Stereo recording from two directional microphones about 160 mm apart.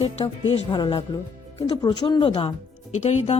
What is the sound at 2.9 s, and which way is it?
Speech, 45° left (ahead or behind).